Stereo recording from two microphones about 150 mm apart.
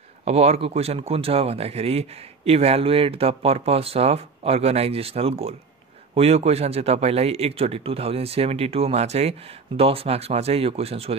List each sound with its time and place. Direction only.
0.2 s speech: 45° right (ahead or behind)